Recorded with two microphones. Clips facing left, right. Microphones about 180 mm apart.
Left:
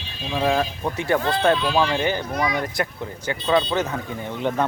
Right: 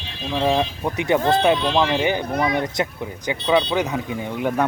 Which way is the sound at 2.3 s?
55° right (ahead or behind).